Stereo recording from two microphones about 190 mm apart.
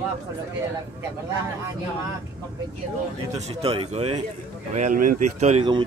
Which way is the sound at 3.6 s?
30° right (ahead or behind).